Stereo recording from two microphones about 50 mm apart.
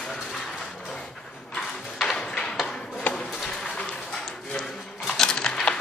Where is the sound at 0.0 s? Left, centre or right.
Centre.